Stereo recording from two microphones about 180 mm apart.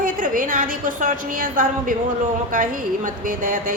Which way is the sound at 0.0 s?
50° right (ahead or behind).